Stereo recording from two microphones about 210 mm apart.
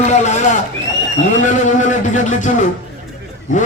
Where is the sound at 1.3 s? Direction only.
35° left (ahead or behind).